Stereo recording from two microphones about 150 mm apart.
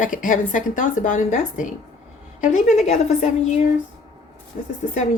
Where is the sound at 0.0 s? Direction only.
65° left (ahead or behind).